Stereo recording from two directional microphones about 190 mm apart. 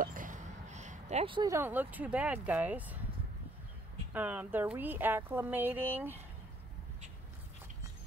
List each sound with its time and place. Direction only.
0.0 s speech: 45° right (ahead or behind); by 3.0 s 10° right (ahead or behind)
4.1 s speech: 10° right (ahead or behind)